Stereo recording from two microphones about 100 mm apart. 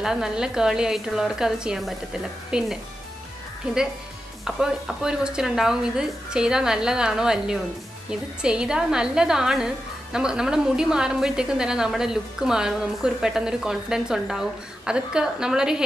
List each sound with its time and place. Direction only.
0.0 s a woman's voice: 5° right (ahead or behind)
4.5 s a woman's voice: 5° right (ahead or behind)